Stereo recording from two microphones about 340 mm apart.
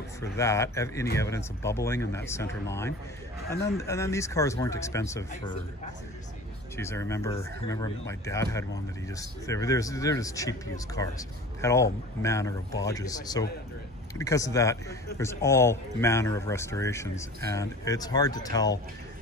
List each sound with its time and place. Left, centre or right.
0.2 s a man's voice: centre
6.8 s a man's voice: centre